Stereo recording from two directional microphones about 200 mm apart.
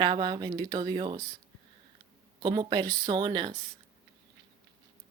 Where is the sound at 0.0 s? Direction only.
20° right (ahead or behind).